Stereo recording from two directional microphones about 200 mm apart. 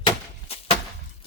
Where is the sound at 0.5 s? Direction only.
30° left (ahead or behind).